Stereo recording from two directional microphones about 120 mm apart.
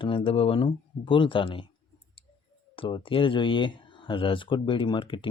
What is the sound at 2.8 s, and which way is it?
Speech, 45° left (ahead or behind).